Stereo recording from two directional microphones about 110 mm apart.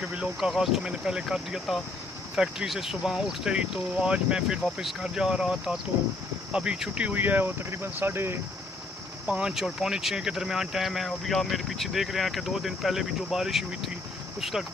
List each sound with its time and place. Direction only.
0.0 s speech: 10° right (ahead or behind)
9.2 s speech: 10° right (ahead or behind)